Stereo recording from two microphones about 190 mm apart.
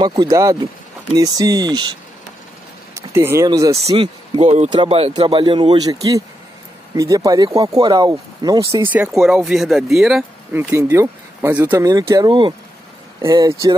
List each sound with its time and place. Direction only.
0.0 s speech: 25° right (ahead or behind)
3.8 s speech: 30° right (ahead or behind)
7.0 s speech: 15° right (ahead or behind); by 10.6 s centre (ahead or behind)
10.7 s speech: 15° right (ahead or behind)